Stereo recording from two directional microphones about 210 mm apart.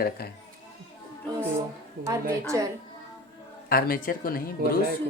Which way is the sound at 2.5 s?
15° right (ahead or behind).